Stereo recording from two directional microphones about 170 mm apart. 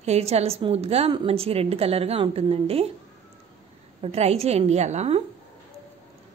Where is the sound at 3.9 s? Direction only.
40° right (ahead or behind).